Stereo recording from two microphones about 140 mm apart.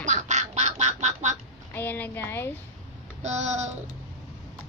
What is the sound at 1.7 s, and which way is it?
Speech, 15° left (ahead or behind).